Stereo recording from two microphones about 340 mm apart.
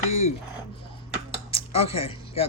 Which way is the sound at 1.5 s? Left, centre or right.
Centre.